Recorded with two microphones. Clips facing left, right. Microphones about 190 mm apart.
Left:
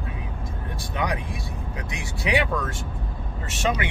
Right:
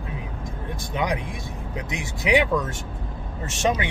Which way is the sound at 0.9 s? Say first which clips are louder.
Right 2 dB; 20° right (ahead or behind).